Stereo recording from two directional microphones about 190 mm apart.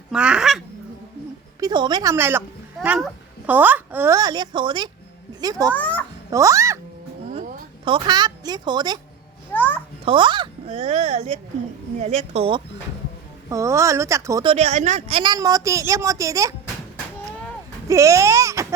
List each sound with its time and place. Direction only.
0.1 s a sound: 5° right (ahead or behind)
1.5 s a child's voice: 20° right (ahead or behind)
5.7 s a sound: 10° left (ahead or behind)
6.3 s speech: 15° right (ahead or behind)
7.3 s a sound: 45° right (ahead or behind)
7.9 s speech: 25° right (ahead or behind)
9.5 s babbling: 10° left (ahead or behind)
10.1 s a child's voice: 25° right (ahead or behind)
13.5 s a child's voice: 15° right (ahead or behind)
14.4 s speech: 35° right (ahead or behind); by 16.6 s 15° right (ahead or behind)
17.8 s speech: 15° right (ahead or behind)